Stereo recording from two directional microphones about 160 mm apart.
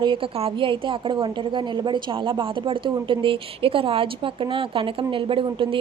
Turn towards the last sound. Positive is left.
turn(degrees=-30)  # may be behind; listen again after turning